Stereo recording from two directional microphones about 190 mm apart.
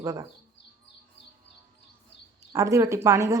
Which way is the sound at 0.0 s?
15° right (ahead or behind).